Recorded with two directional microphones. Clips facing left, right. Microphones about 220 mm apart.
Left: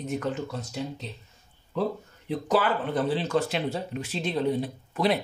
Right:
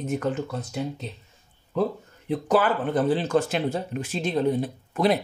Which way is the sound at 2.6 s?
50° right (ahead or behind).